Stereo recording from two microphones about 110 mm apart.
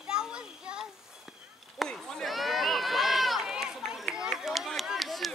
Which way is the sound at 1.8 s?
5° left (ahead or behind).